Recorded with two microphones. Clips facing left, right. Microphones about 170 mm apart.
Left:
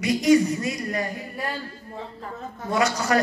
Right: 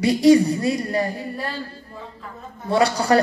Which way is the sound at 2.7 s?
35° right (ahead or behind).